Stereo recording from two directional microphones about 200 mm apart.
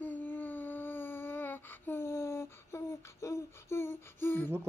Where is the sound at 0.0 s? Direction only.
10° left (ahead or behind).